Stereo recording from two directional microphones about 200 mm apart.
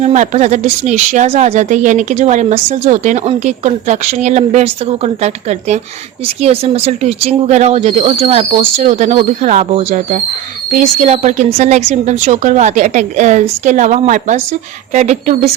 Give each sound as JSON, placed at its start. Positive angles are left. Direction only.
{"t": 0.0, "sound": "a woman's voice", "side_deg": -35}